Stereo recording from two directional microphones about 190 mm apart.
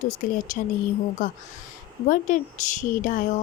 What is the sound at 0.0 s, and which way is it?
Speech, 40° left (ahead or behind).